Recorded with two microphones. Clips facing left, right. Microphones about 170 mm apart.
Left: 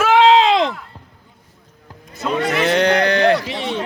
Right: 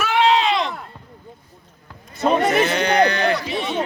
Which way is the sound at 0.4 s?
90° left.